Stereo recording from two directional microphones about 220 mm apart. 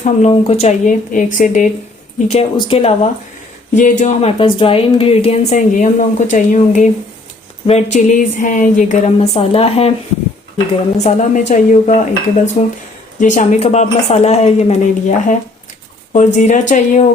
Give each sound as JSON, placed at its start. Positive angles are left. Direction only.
{"t": 0.0, "sound": "a woman's voice", "side_deg": 30}
{"t": 10.9, "sound": "a woman's voice", "side_deg": 30}